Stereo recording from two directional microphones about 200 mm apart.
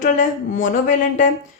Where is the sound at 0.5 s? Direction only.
45° left (ahead or behind).